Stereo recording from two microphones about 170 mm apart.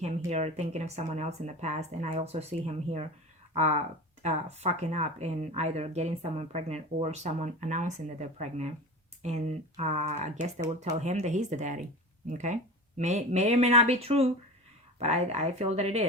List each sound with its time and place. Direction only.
0.0 s speech: 40° right (ahead or behind)